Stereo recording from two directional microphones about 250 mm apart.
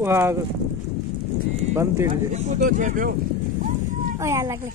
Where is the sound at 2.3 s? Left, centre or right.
Right.